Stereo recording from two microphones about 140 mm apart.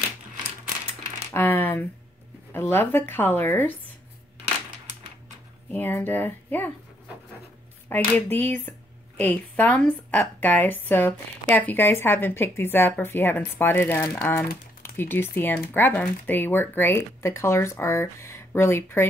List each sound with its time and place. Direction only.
1.3 s a sound: 15° left (ahead or behind)
2.5 s speech: 15° left (ahead or behind)
5.7 s speech: 15° left (ahead or behind)
7.9 s speech: 15° left (ahead or behind)